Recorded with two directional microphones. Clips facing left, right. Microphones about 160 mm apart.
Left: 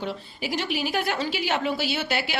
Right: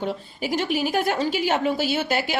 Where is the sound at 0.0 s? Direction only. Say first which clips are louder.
Right 4 dB; 45° right (ahead or behind).